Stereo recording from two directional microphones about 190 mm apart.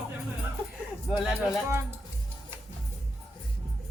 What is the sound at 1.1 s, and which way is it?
Music, centre (ahead or behind).